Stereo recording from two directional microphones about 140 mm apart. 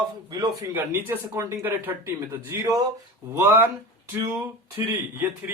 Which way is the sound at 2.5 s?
30° right (ahead or behind).